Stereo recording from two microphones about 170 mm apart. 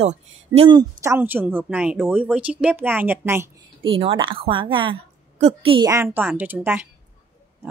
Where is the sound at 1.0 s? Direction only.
15° right (ahead or behind).